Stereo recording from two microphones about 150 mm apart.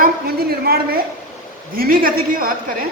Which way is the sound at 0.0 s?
90° right.